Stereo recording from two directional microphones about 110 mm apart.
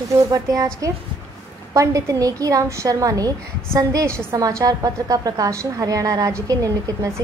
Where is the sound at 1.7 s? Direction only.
30° right (ahead or behind).